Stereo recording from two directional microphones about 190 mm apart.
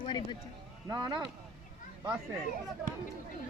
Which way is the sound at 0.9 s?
20° right (ahead or behind).